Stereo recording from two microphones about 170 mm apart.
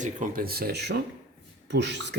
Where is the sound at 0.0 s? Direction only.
50° right (ahead or behind); by 1.0 s 75° right (ahead or behind).